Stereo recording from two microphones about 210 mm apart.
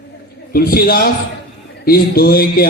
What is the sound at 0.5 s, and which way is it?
A man's voice, 45° left (ahead or behind).